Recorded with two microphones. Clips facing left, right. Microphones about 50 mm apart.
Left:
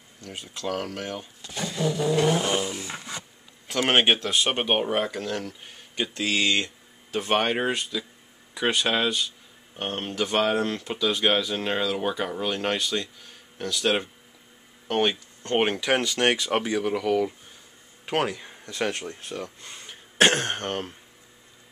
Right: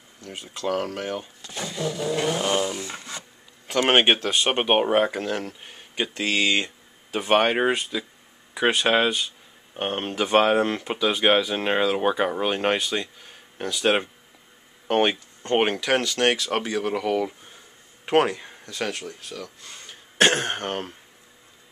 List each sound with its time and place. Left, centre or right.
0.2 s speech: centre
3.6 s speech: centre
15.8 s speech: centre
16.9 s speech: centre
18.3 s a sound: centre
18.7 s speech: left
20.2 s speech: centre